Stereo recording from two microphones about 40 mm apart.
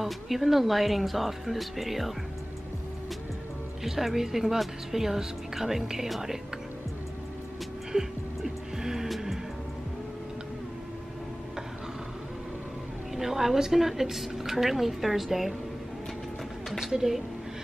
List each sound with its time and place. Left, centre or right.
0.0 s speech: centre
3.8 s a woman's voice: centre
7.9 s music: right
8.4 s music: centre
13.1 s a woman's voice: centre
16.7 s a sound: centre